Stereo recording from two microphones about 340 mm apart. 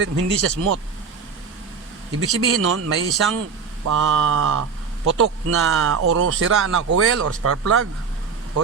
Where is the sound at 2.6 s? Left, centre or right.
Right.